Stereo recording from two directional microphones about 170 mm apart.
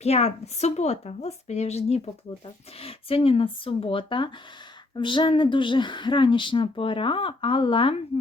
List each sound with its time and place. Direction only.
0.0 s a woman's voice: 40° left (ahead or behind)